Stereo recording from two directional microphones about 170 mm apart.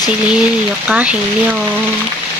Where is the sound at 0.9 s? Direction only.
10° right (ahead or behind).